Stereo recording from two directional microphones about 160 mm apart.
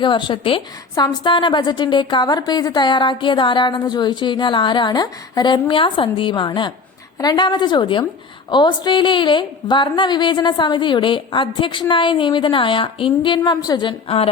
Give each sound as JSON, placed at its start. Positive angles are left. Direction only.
{"t": 0.0, "sound": "a woman's voice", "side_deg": 30}